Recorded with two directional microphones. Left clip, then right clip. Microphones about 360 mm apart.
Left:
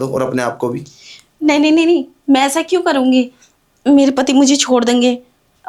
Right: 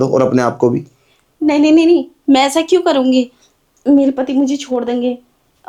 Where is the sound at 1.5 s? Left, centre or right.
Centre.